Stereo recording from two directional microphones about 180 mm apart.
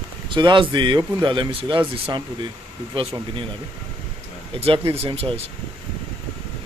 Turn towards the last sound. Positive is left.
turn(degrees=-30)  # may be behind; listen again after turning